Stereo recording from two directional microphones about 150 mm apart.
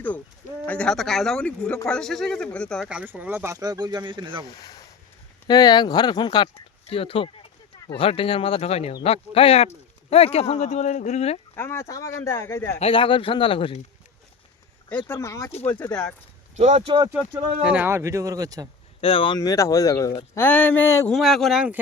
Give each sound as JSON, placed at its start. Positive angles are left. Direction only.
{"t": 0.6, "sound": "a man's voice", "side_deg": 10}
{"t": 2.8, "sound": "speech", "side_deg": -10}
{"t": 4.4, "sound": "speech", "side_deg": 25}
{"t": 11.5, "sound": "speech", "side_deg": 15}
{"t": 12.8, "sound": "speech", "side_deg": 35}
{"t": 14.8, "sound": "speech", "side_deg": 10}
{"t": 16.6, "sound": "speech", "side_deg": -50}
{"t": 16.8, "sound": "speech", "side_deg": -30}
{"t": 17.1, "sound": "speech", "side_deg": -10}
{"t": 19.0, "sound": "speech", "side_deg": 40}
{"t": 19.4, "sound": "speech", "side_deg": 20}
{"t": 21.1, "sound": "a man's voice", "side_deg": 0}